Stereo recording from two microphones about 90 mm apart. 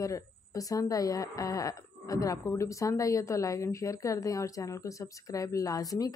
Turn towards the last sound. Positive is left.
turn(degrees=40)  # may be behind; listen again after turning